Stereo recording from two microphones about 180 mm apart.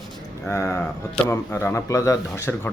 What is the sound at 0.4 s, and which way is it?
Speech, 20° left (ahead or behind).